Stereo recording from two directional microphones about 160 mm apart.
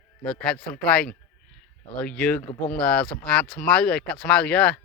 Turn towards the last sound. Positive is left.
turn(degrees=5)  # may be behind; listen again after turning